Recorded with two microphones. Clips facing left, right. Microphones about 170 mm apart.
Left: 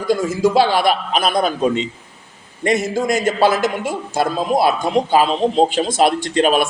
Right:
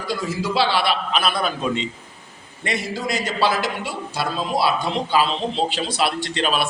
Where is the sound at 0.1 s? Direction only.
45° left (ahead or behind).